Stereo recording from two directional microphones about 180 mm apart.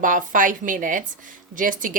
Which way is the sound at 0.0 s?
45° right (ahead or behind).